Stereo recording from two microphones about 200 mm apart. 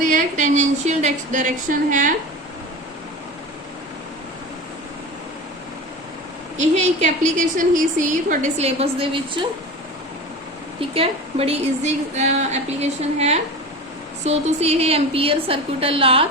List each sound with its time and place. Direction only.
0.0 s a woman's voice: 40° right (ahead or behind)
6.6 s a woman's voice: 35° right (ahead or behind)
10.8 s a woman's voice: 30° right (ahead or behind)